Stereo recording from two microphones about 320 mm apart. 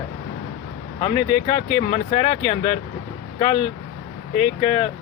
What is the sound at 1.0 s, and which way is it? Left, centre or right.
Speech, centre.